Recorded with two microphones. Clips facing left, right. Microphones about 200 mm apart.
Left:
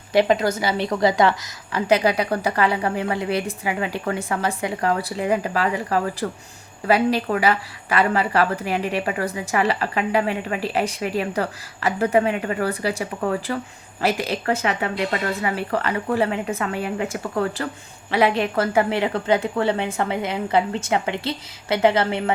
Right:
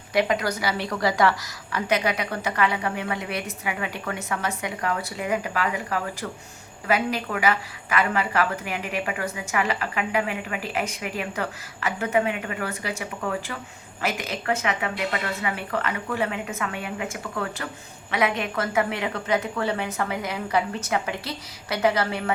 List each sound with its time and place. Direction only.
0.1 s a woman's voice: 30° left (ahead or behind)